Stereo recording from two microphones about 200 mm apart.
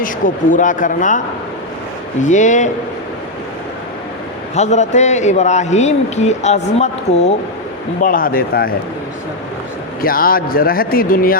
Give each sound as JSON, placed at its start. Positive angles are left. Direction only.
{"t": 0.5, "sound": "a man's voice", "side_deg": 40}
{"t": 2.2, "sound": "a man's voice", "side_deg": 40}
{"t": 4.5, "sound": "a man's voice", "side_deg": 35}
{"t": 8.0, "sound": "a man's voice", "side_deg": 45}
{"t": 10.0, "sound": "a man's voice", "side_deg": 45}